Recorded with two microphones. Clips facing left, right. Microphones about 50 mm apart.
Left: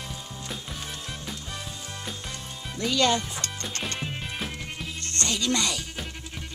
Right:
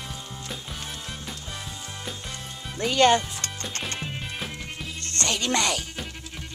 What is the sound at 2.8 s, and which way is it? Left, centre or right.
Speech, right.